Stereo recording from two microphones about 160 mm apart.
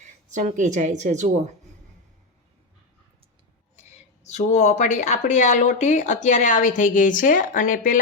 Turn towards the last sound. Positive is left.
turn(degrees=55)  # may be behind; listen again after turning